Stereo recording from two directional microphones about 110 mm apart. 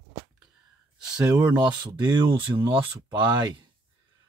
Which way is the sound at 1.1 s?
35° right (ahead or behind).